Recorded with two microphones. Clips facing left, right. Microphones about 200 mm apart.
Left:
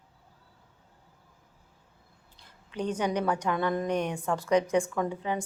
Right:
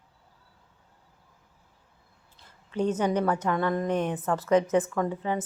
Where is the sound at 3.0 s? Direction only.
10° left (ahead or behind).